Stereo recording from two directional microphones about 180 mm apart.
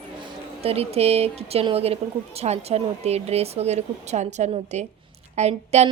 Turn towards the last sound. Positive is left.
turn(degrees=-35)  # may be behind; listen again after turning